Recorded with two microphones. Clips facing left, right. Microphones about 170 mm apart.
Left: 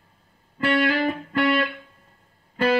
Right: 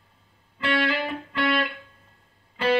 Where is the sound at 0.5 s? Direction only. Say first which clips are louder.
Left 4 dB; 45° left (ahead or behind).